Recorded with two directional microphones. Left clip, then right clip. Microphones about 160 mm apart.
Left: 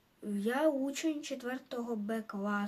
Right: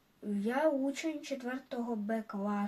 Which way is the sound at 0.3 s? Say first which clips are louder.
Even; 20° left (ahead or behind).